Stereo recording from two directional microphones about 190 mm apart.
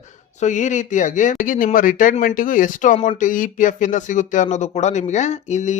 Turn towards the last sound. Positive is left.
turn(degrees=40)  # may be behind; listen again after turning